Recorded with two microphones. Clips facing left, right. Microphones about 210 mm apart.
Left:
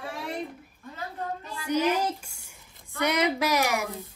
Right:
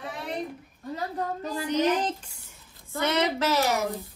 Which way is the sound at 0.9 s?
40° right (ahead or behind).